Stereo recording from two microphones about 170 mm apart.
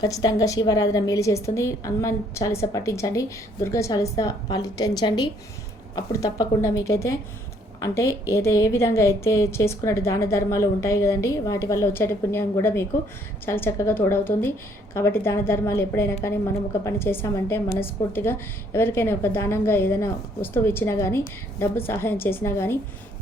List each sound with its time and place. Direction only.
0.0 s a woman's voice: 20° left (ahead or behind)